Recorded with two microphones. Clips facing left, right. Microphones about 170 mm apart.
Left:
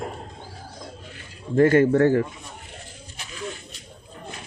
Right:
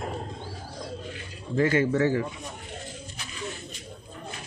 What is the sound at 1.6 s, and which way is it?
Speech, 50° left (ahead or behind).